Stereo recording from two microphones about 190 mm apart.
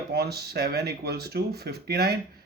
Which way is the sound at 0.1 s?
55° right (ahead or behind).